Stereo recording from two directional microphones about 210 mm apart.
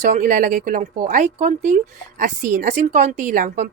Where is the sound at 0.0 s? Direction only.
40° right (ahead or behind).